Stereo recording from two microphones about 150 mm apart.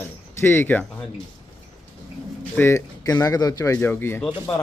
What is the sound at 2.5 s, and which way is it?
Speech, 15° left (ahead or behind).